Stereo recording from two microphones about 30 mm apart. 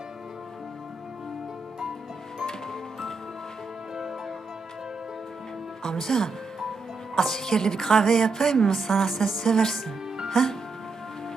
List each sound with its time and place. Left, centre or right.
5.8 s a woman's voice: centre